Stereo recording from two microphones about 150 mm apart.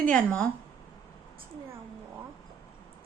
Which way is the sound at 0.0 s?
5° left (ahead or behind).